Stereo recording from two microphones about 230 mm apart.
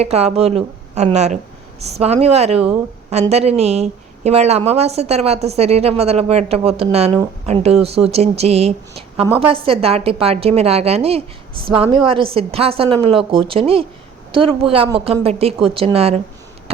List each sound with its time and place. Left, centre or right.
0.0 s speech: right